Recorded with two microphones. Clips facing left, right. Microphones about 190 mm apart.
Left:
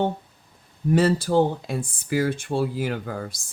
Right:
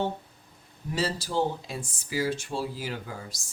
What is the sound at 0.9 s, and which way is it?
Speech, 55° left (ahead or behind).